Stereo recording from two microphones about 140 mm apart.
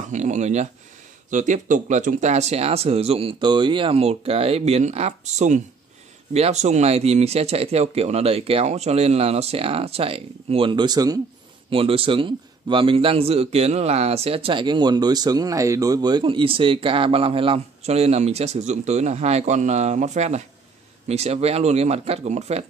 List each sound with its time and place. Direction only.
0.1 s speech: 60° right (ahead or behind)
1.3 s speech: 65° right (ahead or behind); by 11.1 s 30° right (ahead or behind)
11.7 s a man's voice: 40° right (ahead or behind)